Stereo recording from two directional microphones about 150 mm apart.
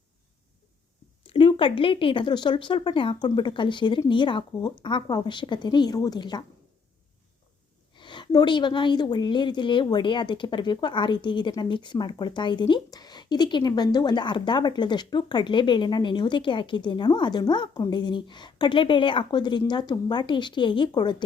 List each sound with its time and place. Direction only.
1.3 s a woman's voice: 35° left (ahead or behind)
7.9 s a woman's voice: 30° left (ahead or behind)